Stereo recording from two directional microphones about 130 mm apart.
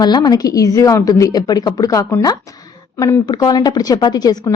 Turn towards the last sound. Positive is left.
turn(degrees=30)  # may be behind; listen again after turning